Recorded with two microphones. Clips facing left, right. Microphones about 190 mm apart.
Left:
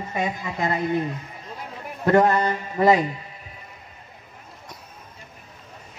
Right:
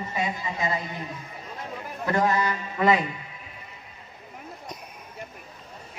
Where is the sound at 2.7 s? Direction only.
40° left (ahead or behind).